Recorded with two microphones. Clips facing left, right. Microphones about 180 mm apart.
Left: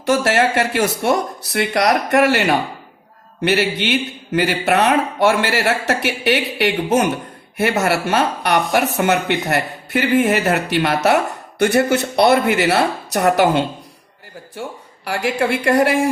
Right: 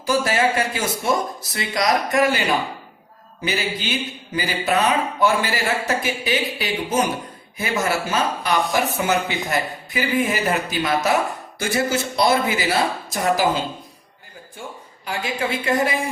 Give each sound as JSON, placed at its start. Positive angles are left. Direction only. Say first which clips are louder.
{"t": 0.0, "sound": "a man's voice", "louder": "left 4 dB", "side_deg": 75}